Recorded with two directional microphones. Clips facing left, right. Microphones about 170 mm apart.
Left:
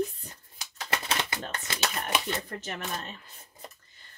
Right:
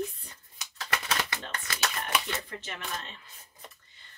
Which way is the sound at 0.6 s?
25° left (ahead or behind).